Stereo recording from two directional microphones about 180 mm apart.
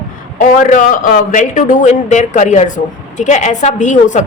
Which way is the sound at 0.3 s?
45° left (ahead or behind).